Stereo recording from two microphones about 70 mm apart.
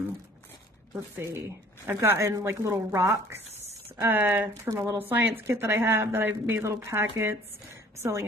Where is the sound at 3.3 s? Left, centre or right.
Right.